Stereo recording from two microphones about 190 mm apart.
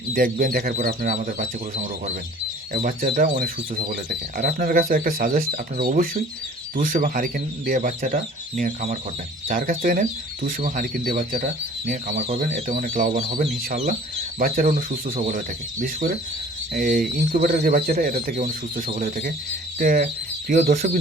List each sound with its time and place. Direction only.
0.1 s speech: 50° right (ahead or behind)
12.4 s speech: 45° right (ahead or behind)